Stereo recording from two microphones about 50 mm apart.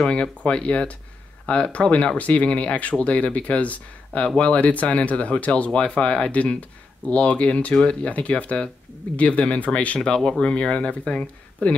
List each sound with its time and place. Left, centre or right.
0.0 s speech: centre
9.9 s speech: centre